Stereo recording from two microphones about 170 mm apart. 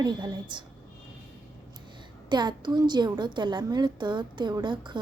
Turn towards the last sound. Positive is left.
turn(degrees=-25)  # may be behind; listen again after turning